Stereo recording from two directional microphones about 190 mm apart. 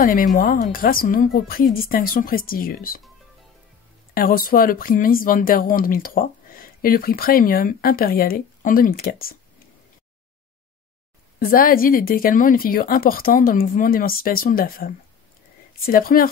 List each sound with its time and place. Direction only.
0.0 s speech: 45° left (ahead or behind)
4.1 s speech: 50° left (ahead or behind)
11.3 s speech: 50° left (ahead or behind)